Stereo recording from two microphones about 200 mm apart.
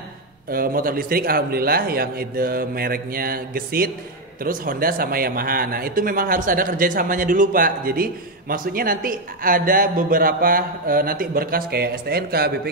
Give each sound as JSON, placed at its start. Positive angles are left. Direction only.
{"t": 0.5, "sound": "speech", "side_deg": -45}